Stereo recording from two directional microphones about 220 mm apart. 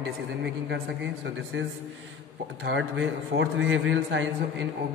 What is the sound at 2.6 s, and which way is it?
A man's voice, 55° right (ahead or behind).